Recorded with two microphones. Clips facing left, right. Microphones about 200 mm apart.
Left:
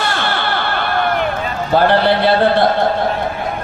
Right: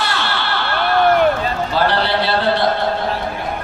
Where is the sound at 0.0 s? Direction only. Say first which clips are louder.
Left 3 dB; 50° left (ahead or behind).